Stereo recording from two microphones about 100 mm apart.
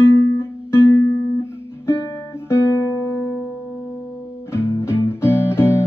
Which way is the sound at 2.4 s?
25° left (ahead or behind).